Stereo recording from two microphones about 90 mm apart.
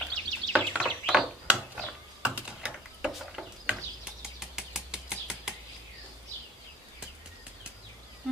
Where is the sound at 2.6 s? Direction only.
5° right (ahead or behind).